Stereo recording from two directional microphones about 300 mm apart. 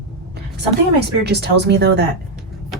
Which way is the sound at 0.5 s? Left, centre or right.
Right.